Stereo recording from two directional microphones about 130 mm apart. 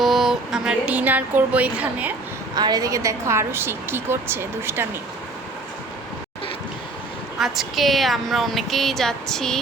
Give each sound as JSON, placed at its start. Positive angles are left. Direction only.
{"t": 0.0, "sound": "speech", "side_deg": 0}
{"t": 2.6, "sound": "a woman's voice", "side_deg": -30}
{"t": 7.3, "sound": "a woman's voice", "side_deg": -5}